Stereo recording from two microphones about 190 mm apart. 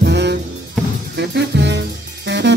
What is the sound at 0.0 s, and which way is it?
Music, 65° right (ahead or behind).